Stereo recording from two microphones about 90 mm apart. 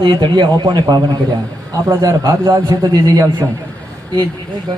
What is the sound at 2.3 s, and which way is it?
A man's voice, 35° right (ahead or behind).